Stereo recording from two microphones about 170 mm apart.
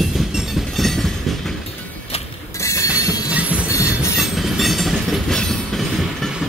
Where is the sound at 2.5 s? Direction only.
15° left (ahead or behind).